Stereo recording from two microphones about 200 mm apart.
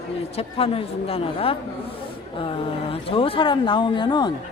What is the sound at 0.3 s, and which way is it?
A man's voice, 30° left (ahead or behind).